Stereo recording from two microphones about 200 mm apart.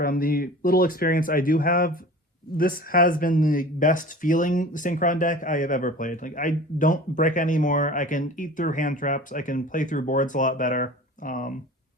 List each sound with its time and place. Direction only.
0.0 s speech: 45° left (ahead or behind)